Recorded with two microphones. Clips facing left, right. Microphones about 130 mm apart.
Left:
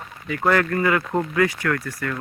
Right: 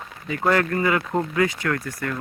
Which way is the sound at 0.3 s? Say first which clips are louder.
Left 1 dB; 20° right (ahead or behind).